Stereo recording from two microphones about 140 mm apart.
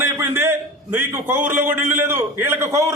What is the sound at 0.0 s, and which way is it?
A man's voice, 15° right (ahead or behind).